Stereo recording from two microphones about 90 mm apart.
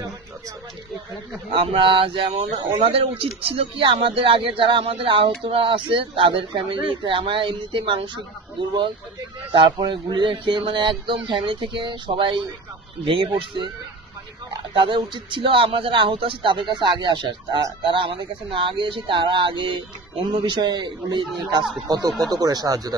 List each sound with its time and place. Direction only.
1.5 s speech: 70° right (ahead or behind)
14.6 s speech: 70° right (ahead or behind); by 22.9 s 45° right (ahead or behind)